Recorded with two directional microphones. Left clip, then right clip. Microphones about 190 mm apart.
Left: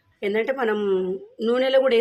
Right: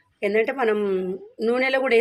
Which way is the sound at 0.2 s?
10° right (ahead or behind).